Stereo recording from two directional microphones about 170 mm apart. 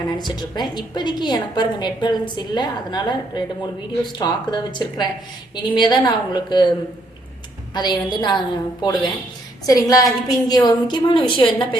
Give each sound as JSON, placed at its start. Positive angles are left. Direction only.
{"t": 0.2, "sound": "a woman's voice", "side_deg": 25}